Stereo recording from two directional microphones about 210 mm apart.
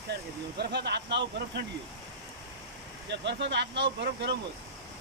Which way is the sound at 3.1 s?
55° right (ahead or behind).